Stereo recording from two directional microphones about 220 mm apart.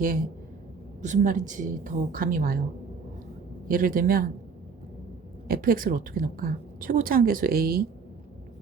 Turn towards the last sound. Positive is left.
turn(degrees=-45)  # may be behind; listen again after turning